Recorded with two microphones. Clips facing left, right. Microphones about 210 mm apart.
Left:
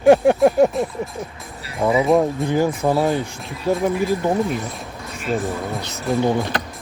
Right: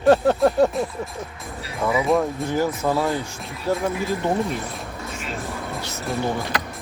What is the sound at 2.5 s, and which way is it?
Speech, 15° left (ahead or behind).